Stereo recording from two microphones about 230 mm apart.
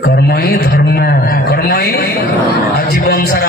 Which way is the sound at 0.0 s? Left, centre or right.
Left.